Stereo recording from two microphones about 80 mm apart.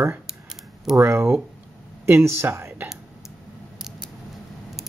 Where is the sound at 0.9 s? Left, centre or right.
Right.